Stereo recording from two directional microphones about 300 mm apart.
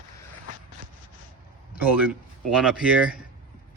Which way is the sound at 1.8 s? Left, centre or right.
Centre.